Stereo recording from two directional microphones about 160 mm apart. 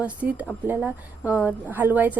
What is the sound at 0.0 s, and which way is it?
A woman's voice, 10° right (ahead or behind).